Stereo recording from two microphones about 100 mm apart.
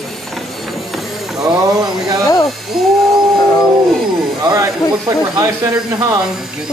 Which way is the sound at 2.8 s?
Centre (ahead or behind).